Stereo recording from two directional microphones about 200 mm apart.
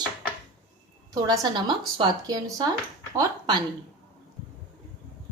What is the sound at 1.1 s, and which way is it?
Speech, 20° right (ahead or behind).